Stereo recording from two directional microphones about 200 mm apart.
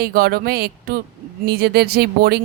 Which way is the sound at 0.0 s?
50° right (ahead or behind).